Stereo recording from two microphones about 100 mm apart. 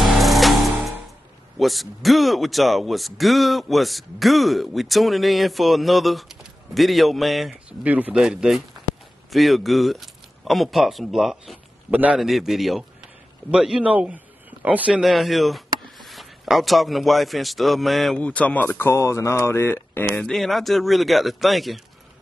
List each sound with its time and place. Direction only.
0.0 s music: centre (ahead or behind)
1.6 s speech: centre (ahead or behind)
7.8 s speech: 15° right (ahead or behind)
11.9 s speech: 15° right (ahead or behind)
12.2 s a man's voice: centre (ahead or behind)
15.0 s speech: centre (ahead or behind)
18.2 s speech: 15° left (ahead or behind)
20.2 s speech: 5° left (ahead or behind)